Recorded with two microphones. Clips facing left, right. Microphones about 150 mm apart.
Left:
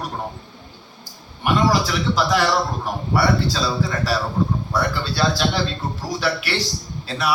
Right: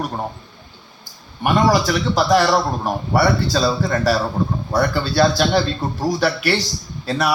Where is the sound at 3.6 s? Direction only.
45° right (ahead or behind).